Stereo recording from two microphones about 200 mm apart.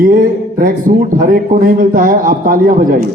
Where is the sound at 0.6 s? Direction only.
45° right (ahead or behind).